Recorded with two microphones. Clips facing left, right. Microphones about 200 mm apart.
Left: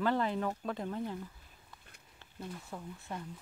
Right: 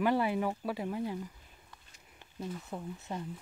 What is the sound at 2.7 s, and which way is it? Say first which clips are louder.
Speech: right 3 dB; 15° right (ahead or behind).